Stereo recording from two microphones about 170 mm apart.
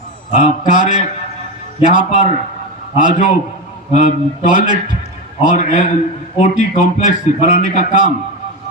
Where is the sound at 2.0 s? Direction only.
45° left (ahead or behind).